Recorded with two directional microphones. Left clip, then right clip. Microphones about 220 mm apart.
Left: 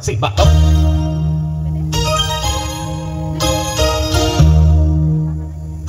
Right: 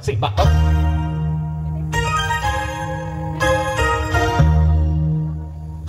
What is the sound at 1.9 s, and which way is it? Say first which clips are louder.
Music: left 2 dB; 20° right (ahead or behind).